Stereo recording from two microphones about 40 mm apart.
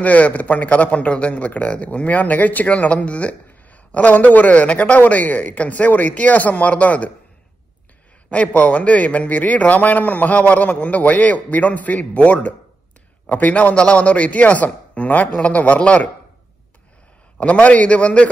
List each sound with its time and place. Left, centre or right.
0.0 s a man's voice: left
8.3 s a man's voice: left
13.6 s a man's voice: left
15.3 s a man's voice: left
17.4 s a man's voice: left